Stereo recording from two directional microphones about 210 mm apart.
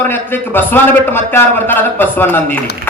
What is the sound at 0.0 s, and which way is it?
A man's voice, 10° left (ahead or behind).